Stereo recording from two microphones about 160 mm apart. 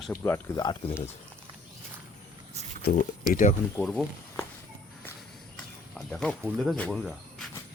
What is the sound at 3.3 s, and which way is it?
Speech, 55° left (ahead or behind).